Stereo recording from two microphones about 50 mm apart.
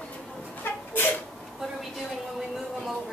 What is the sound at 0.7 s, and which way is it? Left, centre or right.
Sneeze, left.